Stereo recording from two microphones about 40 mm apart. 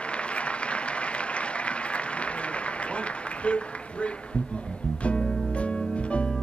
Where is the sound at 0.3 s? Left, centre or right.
Left.